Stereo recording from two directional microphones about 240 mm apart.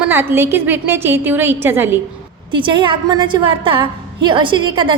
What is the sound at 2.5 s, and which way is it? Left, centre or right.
A woman's voice, centre.